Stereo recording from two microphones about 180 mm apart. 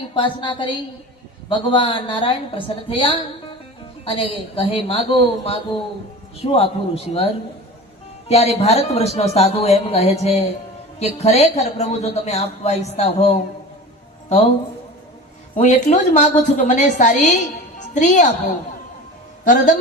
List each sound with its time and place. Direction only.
0.1 s a woman's voice: 25° left (ahead or behind)
8.3 s a woman's voice: 35° left (ahead or behind)
15.5 s a woman's voice: 40° left (ahead or behind)
17.7 s music: 45° left (ahead or behind)
19.5 s a woman's voice: 45° left (ahead or behind)